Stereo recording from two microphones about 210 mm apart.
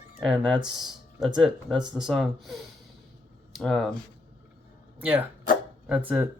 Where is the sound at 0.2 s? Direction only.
5° left (ahead or behind).